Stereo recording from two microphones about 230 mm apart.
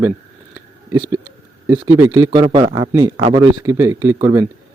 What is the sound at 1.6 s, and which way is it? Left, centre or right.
Speech, centre.